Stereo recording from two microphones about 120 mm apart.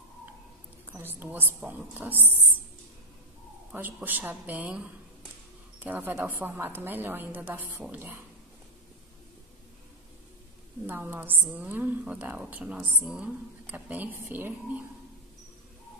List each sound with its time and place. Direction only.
0.9 s a woman's voice: 15° right (ahead or behind)
3.7 s a woman's voice: 15° right (ahead or behind)
10.9 s a woman's voice: 15° right (ahead or behind)